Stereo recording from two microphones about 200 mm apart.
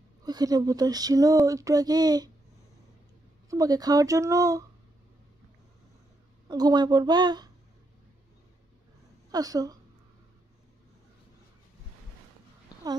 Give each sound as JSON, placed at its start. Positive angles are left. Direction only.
{"t": 0.2, "sound": "speech", "side_deg": -20}
{"t": 3.4, "sound": "speech", "side_deg": -15}
{"t": 6.5, "sound": "a woman's voice", "side_deg": -20}
{"t": 9.3, "sound": "speech", "side_deg": -20}
{"t": 12.7, "sound": "a sound", "side_deg": 20}